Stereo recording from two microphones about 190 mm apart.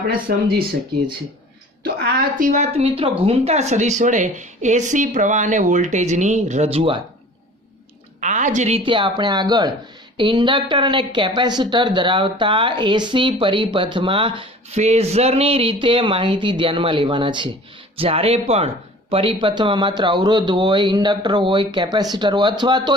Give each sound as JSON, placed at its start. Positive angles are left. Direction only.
{"t": 0.3, "sound": "speech", "side_deg": -55}
{"t": 1.8, "sound": "a woman's voice", "side_deg": -55}
{"t": 8.2, "sound": "a woman's voice", "side_deg": -40}